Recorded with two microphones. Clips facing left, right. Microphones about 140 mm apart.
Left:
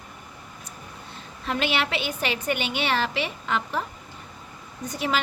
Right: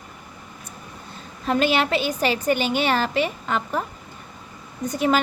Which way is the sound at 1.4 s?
40° right (ahead or behind).